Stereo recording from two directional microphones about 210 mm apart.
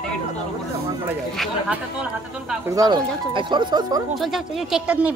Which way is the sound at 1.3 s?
Centre (ahead or behind).